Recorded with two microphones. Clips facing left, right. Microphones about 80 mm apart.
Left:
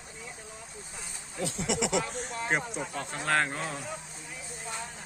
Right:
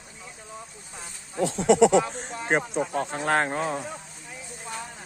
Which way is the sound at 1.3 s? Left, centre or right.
Right.